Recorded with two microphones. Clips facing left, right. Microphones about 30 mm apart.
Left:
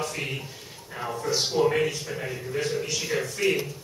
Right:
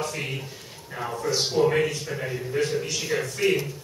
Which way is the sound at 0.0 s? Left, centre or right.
Centre.